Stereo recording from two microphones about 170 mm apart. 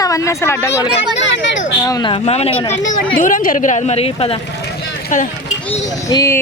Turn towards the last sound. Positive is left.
turn(degrees=20)  # may be behind; listen again after turning